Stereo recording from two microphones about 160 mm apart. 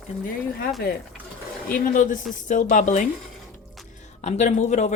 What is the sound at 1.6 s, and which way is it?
Speech, 60° left (ahead or behind).